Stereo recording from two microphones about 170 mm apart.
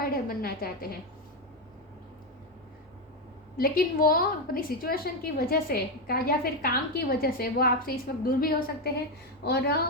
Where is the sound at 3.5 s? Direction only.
60° left (ahead or behind).